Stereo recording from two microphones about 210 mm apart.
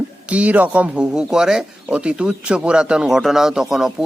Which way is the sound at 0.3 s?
5° right (ahead or behind).